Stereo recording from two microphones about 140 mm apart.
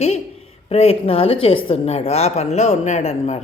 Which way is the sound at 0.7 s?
45° left (ahead or behind).